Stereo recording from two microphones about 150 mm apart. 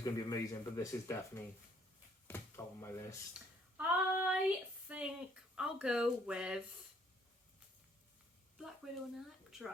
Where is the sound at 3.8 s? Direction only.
10° right (ahead or behind).